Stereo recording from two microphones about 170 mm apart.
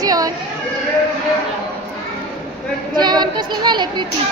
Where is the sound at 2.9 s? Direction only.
25° right (ahead or behind).